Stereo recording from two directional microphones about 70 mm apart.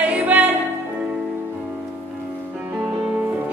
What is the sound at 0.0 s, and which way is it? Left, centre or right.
Music, right.